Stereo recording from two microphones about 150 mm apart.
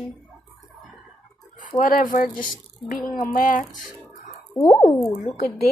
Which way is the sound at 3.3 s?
65° left (ahead or behind).